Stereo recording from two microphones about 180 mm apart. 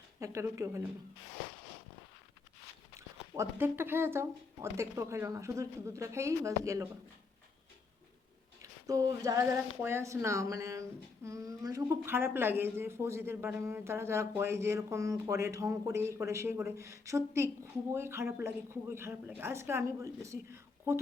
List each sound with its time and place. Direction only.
0.2 s speech: 15° right (ahead or behind)
3.3 s speech: 15° right (ahead or behind)
8.9 s a sound: 20° right (ahead or behind)
9.8 s speech: 15° right (ahead or behind)